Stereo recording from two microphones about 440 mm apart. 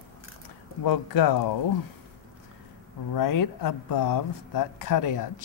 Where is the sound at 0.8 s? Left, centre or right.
Left.